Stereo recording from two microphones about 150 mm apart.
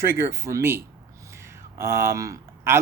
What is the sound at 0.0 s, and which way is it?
Speech, 15° right (ahead or behind).